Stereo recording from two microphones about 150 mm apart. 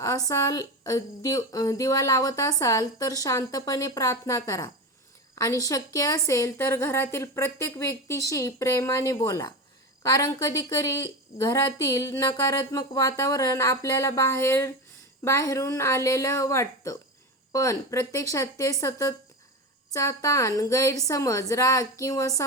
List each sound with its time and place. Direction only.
0.3 s speech: 20° left (ahead or behind)